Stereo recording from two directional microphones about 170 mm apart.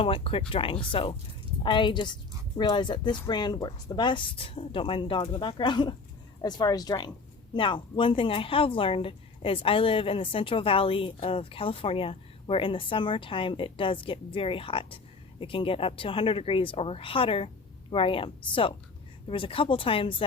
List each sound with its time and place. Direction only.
0.0 s speech: 35° left (ahead or behind)